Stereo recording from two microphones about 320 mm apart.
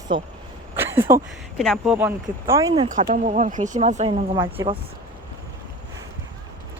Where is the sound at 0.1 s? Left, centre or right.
Centre.